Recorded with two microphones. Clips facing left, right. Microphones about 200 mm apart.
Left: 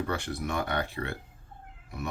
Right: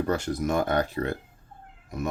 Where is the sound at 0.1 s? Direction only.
40° right (ahead or behind).